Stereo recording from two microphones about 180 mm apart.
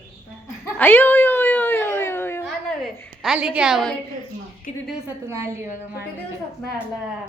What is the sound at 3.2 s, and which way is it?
Speech, 5° right (ahead or behind).